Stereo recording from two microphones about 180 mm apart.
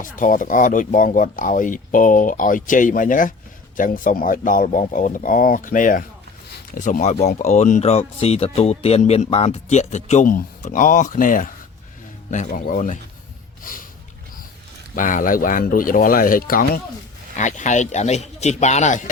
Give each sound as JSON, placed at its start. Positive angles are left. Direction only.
{"t": 0.0, "sound": "speech", "side_deg": 50}
{"t": 13.6, "sound": "snort", "side_deg": 50}
{"t": 14.9, "sound": "speech", "side_deg": 45}
{"t": 17.3, "sound": "speech", "side_deg": 40}